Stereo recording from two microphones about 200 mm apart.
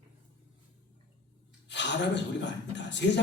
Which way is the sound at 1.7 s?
60° left (ahead or behind).